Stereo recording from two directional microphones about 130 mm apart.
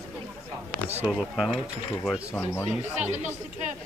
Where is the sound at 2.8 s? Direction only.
65° right (ahead or behind).